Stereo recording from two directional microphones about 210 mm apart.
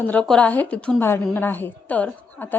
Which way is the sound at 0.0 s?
5° left (ahead or behind).